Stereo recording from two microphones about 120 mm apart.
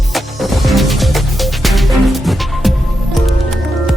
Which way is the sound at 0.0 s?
Centre (ahead or behind).